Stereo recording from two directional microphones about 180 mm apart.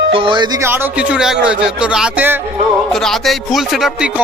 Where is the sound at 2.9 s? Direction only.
Centre (ahead or behind).